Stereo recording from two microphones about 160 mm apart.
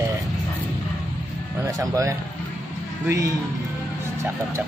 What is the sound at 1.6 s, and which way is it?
Speech, 20° right (ahead or behind).